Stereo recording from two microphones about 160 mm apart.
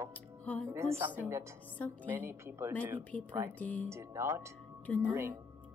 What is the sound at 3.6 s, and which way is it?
Speech, 10° left (ahead or behind).